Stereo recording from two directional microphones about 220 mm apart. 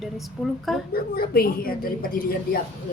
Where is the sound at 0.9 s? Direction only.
45° left (ahead or behind).